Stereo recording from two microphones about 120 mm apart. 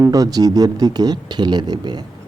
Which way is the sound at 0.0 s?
30° right (ahead or behind).